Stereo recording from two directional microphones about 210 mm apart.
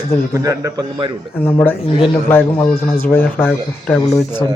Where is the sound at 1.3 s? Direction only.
10° left (ahead or behind).